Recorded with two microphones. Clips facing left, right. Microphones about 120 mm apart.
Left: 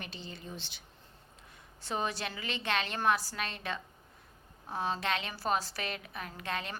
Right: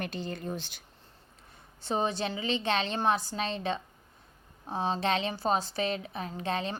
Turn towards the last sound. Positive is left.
turn(degrees=-30)  # may be behind; listen again after turning